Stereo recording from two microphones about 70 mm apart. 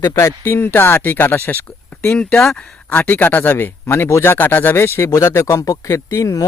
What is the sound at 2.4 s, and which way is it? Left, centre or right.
Speech, centre.